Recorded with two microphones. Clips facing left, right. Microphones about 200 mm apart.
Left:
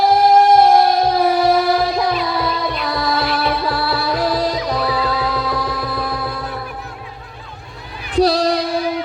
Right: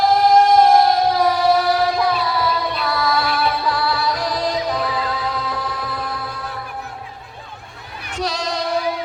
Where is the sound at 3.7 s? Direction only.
35° left (ahead or behind).